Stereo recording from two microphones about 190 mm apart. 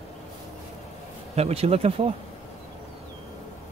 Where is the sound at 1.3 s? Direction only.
35° right (ahead or behind).